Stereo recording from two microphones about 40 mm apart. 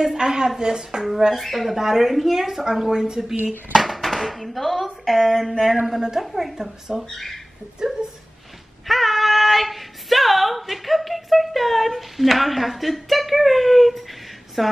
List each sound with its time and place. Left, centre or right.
0.0 s speech: centre
1.3 s speech: centre
5.9 s speech: centre
8.8 s speech: centre